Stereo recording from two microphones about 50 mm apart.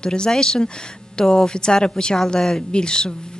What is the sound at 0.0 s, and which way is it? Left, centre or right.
A woman's voice, centre.